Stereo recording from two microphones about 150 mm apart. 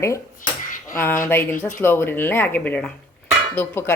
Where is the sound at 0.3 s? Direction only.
65° left (ahead or behind).